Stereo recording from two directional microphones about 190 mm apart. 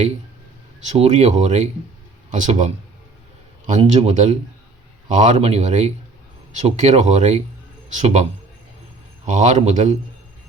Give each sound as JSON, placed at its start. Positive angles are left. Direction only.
{"t": 0.8, "sound": "speech", "side_deg": -35}
{"t": 3.8, "sound": "speech", "side_deg": -35}
{"t": 9.2, "sound": "speech", "side_deg": -40}